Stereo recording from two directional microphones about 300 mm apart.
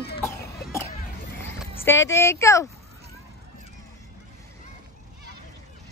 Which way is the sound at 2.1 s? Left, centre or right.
Centre.